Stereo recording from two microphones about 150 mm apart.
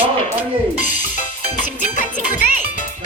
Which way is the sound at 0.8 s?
60° left (ahead or behind).